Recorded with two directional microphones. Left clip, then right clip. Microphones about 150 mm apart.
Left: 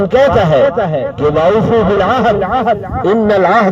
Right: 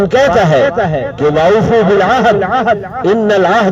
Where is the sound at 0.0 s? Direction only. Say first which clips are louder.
Even; 40° left (ahead or behind).